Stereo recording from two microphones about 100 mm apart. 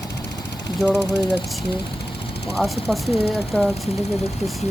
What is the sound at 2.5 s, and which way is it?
Speech, centre (ahead or behind).